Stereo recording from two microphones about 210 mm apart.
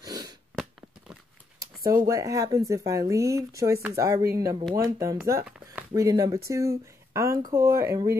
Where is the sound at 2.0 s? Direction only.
15° right (ahead or behind).